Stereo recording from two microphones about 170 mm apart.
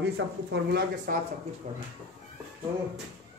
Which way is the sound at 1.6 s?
45° right (ahead or behind).